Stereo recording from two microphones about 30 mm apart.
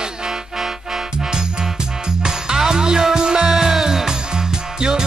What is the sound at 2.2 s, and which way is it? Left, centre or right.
Music, centre.